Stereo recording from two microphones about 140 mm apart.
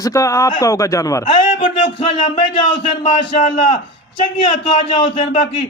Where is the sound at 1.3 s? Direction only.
50° left (ahead or behind).